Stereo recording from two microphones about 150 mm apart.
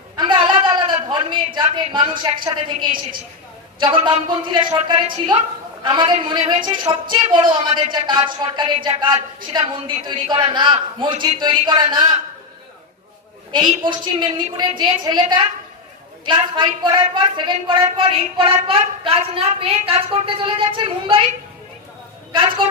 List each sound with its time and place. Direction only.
0.2 s a sound: 30° right (ahead or behind)
3.8 s a woman's voice: 30° right (ahead or behind)
13.5 s a woman's voice: 30° right (ahead or behind)
22.3 s a woman's voice: 35° right (ahead or behind)